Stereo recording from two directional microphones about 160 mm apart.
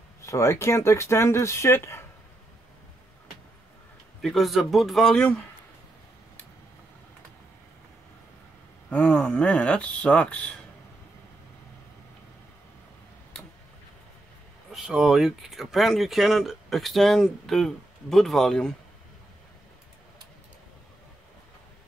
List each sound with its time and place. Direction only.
0.2 s speech: 20° left (ahead or behind)
4.2 s speech: centre (ahead or behind)
8.9 s speech: 5° left (ahead or behind)
14.7 s speech: 5° right (ahead or behind)